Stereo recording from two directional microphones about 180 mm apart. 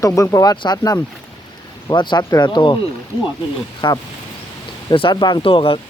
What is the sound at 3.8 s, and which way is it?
Speech, 25° left (ahead or behind).